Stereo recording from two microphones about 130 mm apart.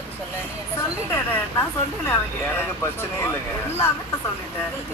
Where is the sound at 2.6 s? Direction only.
15° left (ahead or behind).